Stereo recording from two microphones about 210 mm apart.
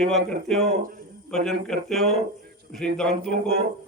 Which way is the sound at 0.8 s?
40° right (ahead or behind).